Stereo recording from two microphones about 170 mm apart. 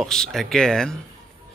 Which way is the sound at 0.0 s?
Centre (ahead or behind).